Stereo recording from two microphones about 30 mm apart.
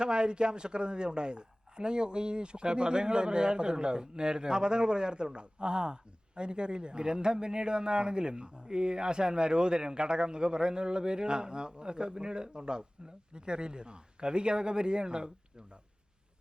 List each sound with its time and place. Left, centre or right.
0.0 s a woman's voice: right